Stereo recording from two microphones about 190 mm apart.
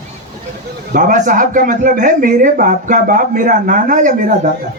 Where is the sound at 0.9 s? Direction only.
45° right (ahead or behind).